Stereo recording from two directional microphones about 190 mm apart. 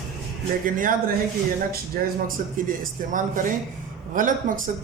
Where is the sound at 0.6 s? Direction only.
45° right (ahead or behind).